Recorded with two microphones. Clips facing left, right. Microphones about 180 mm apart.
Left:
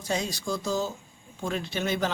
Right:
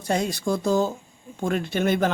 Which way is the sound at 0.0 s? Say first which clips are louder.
Right 6 dB; 55° right (ahead or behind).